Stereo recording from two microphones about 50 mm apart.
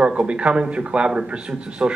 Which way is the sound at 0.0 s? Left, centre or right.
Right.